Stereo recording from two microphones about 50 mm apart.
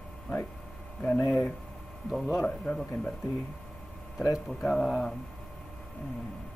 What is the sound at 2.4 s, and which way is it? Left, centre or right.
Speech, left.